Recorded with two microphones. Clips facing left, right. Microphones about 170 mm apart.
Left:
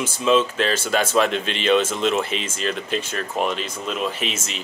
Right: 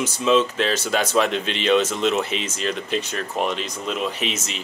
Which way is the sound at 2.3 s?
50° left (ahead or behind).